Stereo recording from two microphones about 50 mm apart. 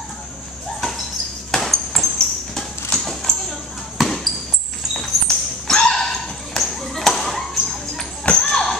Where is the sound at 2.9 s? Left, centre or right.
Centre.